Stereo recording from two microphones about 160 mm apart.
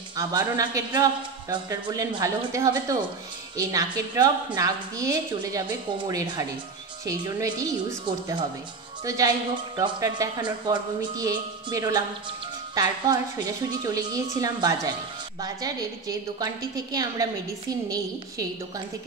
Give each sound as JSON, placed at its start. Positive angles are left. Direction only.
{"t": 0.1, "sound": "speech", "side_deg": -25}